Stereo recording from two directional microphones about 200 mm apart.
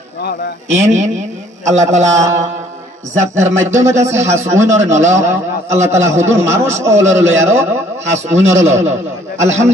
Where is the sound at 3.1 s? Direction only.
75° right (ahead or behind).